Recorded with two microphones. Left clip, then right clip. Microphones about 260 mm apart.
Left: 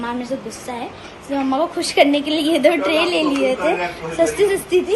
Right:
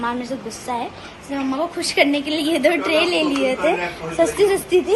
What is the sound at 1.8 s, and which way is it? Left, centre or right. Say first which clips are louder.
A woman's voice: left 2 dB; centre.